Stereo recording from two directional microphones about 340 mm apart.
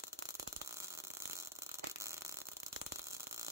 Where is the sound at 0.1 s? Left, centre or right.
Centre.